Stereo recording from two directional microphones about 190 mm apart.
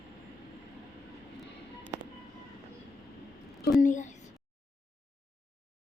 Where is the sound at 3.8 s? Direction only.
40° left (ahead or behind).